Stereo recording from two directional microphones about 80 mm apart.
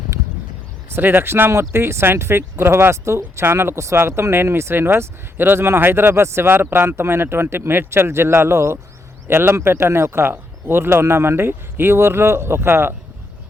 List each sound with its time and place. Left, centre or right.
0.9 s speech: right